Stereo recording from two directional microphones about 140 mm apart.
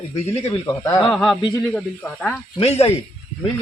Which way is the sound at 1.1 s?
Centre (ahead or behind).